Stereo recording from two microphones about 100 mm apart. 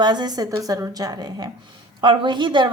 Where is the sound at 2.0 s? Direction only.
55° right (ahead or behind).